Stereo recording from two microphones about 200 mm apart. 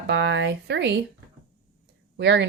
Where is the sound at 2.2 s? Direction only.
60° right (ahead or behind).